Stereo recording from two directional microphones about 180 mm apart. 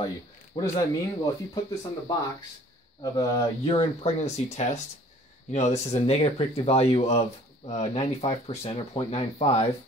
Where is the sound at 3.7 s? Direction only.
35° left (ahead or behind).